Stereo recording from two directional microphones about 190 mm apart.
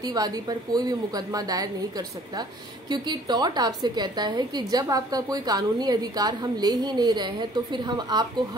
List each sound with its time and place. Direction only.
0.0 s a woman's voice: 20° right (ahead or behind)